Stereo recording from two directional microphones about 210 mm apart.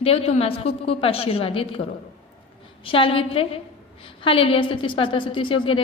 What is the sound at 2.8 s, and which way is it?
A woman's voice, 25° left (ahead or behind).